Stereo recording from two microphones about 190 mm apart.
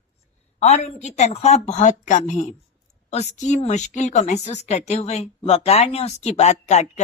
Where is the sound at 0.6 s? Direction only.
35° left (ahead or behind).